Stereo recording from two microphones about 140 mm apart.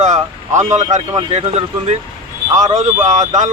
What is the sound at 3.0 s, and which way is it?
Speech, 65° right (ahead or behind).